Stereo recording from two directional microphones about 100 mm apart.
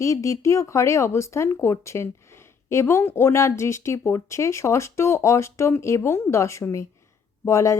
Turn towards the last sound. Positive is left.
turn(degrees=30)  # may be behind; listen again after turning